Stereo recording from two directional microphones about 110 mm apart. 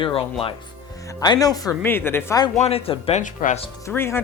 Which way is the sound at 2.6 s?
65° left (ahead or behind).